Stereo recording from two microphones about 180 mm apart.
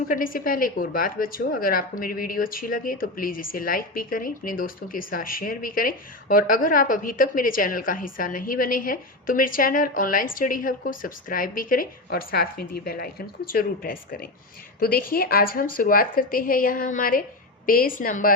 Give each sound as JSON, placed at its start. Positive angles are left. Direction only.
{"t": 0.1, "sound": "a woman's voice", "side_deg": 50}